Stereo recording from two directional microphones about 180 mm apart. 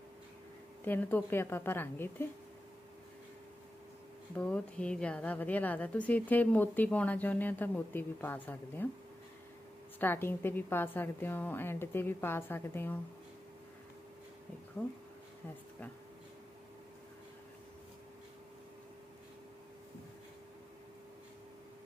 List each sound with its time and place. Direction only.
0.9 s a woman's voice: 10° left (ahead or behind)
4.4 s a woman's voice: 5° left (ahead or behind)
10.0 s a woman's voice: 10° left (ahead or behind)